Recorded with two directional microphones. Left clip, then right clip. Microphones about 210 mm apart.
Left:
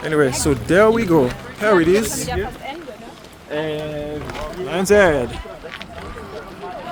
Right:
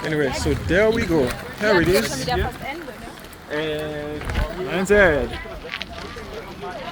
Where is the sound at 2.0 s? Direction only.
40° right (ahead or behind).